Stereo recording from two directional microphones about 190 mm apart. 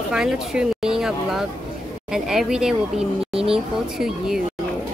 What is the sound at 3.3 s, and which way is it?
Speech, 30° right (ahead or behind).